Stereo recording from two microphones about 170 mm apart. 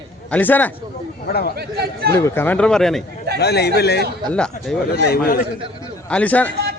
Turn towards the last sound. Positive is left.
turn(degrees=10)  # may be behind; listen again after turning